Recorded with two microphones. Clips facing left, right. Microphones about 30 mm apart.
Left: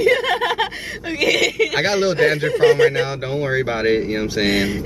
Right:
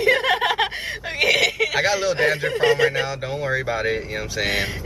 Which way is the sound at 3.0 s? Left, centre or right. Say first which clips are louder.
Left 3 dB; centre.